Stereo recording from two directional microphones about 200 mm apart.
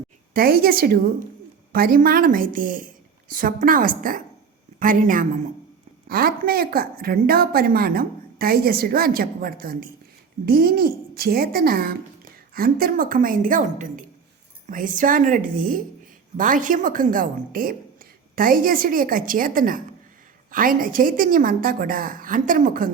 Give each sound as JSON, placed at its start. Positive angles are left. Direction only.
{"t": 0.3, "sound": "a woman's voice", "side_deg": -50}